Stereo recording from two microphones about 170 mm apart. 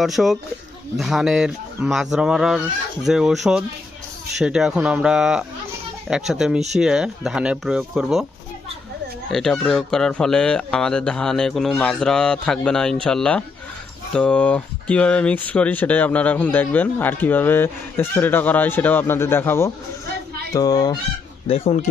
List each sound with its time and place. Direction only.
0.0 s speech: centre (ahead or behind)
9.3 s speech: 5° left (ahead or behind)
20.5 s fowl: 20° left (ahead or behind)
21.5 s speech: 35° left (ahead or behind)